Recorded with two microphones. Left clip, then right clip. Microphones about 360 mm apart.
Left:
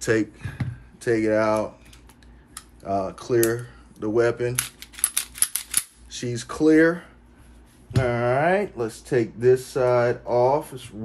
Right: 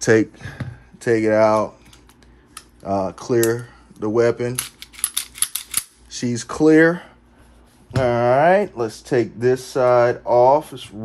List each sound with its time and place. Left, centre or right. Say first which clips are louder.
0.0 s speech: right 7 dB; centre
2.8 s speech: right 4 dB; right
5.3 s typewriter: right 2 dB; centre
6.0 s speech: right 5 dB; centre